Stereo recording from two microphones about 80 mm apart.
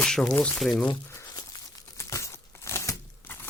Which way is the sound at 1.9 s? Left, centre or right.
Left.